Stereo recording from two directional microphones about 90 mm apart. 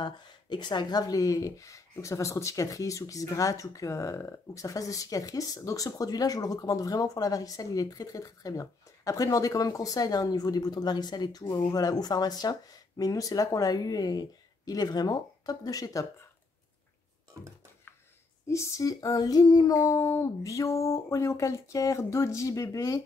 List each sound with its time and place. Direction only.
0.0 s speech: 55° left (ahead or behind); by 16.1 s 40° left (ahead or behind)
18.5 s speech: 35° left (ahead or behind)